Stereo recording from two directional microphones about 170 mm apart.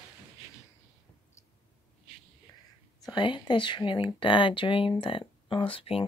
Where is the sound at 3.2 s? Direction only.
25° left (ahead or behind).